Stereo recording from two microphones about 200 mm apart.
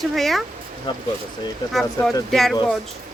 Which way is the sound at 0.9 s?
25° left (ahead or behind).